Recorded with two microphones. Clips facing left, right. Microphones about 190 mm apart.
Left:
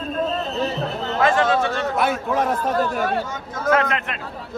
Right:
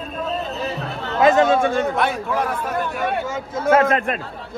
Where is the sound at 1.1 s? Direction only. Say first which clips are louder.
Right 4 dB; 20° right (ahead or behind).